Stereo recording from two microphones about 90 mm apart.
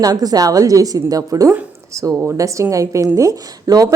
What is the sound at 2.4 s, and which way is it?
A woman's voice, 35° right (ahead or behind).